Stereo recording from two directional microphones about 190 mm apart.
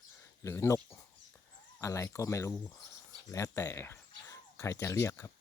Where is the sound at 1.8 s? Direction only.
15° left (ahead or behind).